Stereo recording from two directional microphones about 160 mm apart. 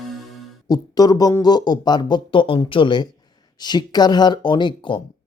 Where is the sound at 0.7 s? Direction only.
25° left (ahead or behind).